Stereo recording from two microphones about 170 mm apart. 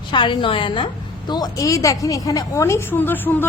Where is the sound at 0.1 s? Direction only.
30° left (ahead or behind).